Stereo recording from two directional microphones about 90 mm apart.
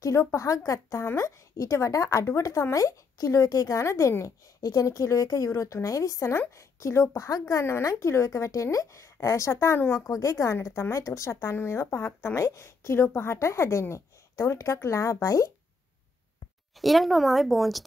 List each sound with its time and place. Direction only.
0.0 s a woman's voice: 30° left (ahead or behind)
16.8 s speech: centre (ahead or behind)